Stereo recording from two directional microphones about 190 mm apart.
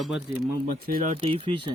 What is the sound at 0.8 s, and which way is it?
Speech, 45° right (ahead or behind).